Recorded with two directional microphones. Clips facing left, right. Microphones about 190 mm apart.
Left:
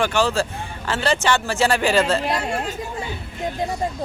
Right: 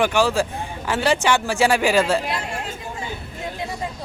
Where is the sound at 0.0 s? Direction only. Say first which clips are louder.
Right 1 dB; 15° right (ahead or behind).